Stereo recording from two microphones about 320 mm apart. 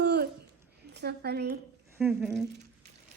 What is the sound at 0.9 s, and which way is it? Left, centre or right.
Speech, right.